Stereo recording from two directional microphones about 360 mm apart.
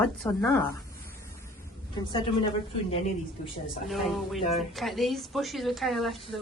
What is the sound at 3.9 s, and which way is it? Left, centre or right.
A woman's voice, centre.